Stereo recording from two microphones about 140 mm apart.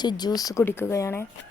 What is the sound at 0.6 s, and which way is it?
Speech, 15° left (ahead or behind).